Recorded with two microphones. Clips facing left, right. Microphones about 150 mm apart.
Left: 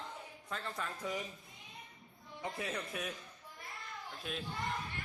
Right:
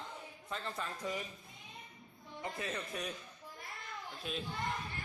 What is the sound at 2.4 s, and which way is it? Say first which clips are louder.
Speech: left 1 dB; 10° left (ahead or behind).